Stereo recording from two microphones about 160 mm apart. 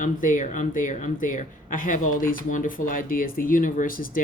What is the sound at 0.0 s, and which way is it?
Speech, 55° left (ahead or behind).